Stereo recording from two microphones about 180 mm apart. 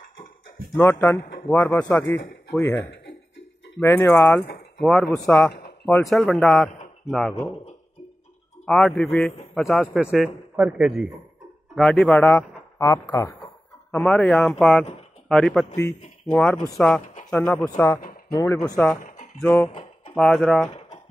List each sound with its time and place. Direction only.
0.7 s speech: 15° left (ahead or behind)
8.6 s speech: centre (ahead or behind)
12.7 s speech: 20° left (ahead or behind)
13.9 s speech: 5° left (ahead or behind)
19.7 s a sound: 35° left (ahead or behind)
20.2 s speech: centre (ahead or behind)